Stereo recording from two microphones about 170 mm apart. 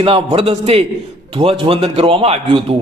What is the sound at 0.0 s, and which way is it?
A man's voice, 35° right (ahead or behind).